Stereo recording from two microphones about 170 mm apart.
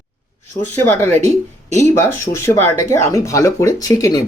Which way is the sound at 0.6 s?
10° left (ahead or behind).